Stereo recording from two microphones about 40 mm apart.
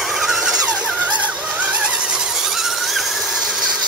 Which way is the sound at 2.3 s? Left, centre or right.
Centre.